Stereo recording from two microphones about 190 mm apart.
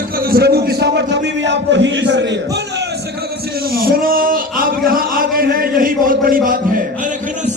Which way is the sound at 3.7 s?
50° right (ahead or behind).